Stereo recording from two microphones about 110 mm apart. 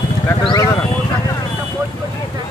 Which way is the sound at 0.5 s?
30° left (ahead or behind).